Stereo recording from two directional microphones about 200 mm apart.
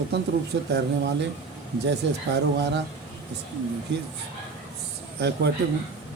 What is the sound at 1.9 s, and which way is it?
Speech, 60° right (ahead or behind).